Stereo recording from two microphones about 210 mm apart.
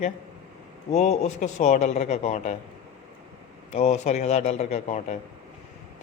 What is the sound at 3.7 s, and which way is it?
A man's voice, 30° left (ahead or behind).